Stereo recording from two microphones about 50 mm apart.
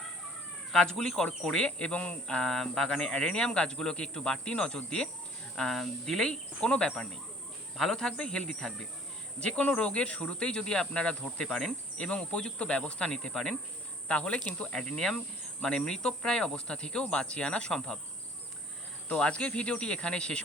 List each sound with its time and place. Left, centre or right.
0.7 s speech: centre
8.4 s insect: centre
9.7 s speech: centre
11.4 s insect: centre
11.9 s speech: centre
14.1 s speech: left
14.7 s speech: centre
19.1 s speech: left